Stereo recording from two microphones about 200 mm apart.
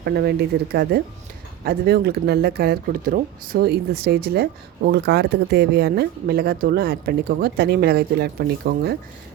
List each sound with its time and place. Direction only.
0.0 s speech: 55° right (ahead or behind)